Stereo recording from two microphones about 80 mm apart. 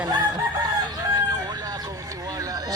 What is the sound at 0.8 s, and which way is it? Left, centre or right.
Chicken, right.